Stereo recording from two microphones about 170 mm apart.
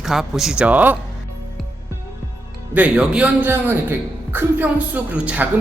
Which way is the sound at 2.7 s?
10° right (ahead or behind).